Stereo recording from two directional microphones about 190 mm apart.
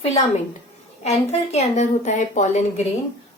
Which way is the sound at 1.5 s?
40° left (ahead or behind).